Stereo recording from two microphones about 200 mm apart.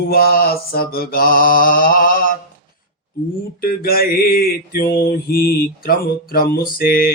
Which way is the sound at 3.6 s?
45° left (ahead or behind).